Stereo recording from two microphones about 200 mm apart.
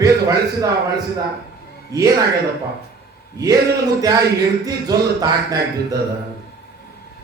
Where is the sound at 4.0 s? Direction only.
20° right (ahead or behind).